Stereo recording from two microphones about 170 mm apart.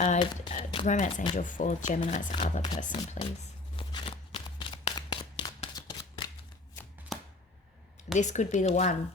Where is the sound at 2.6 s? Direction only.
25° left (ahead or behind).